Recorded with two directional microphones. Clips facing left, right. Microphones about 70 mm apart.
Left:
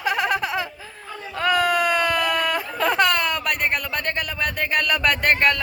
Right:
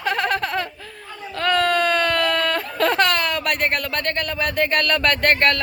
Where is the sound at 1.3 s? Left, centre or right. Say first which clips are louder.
Right 1 dB; centre.